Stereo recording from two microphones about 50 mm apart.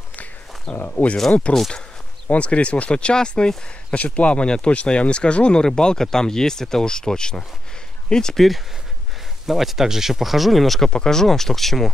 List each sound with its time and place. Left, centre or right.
0.1 s a sound: left
1.5 s speech: left
9.5 s speech: centre
10.9 s speech: centre